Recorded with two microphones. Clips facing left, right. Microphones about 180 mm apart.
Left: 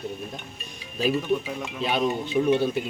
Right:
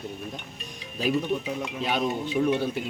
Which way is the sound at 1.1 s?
Centre (ahead or behind).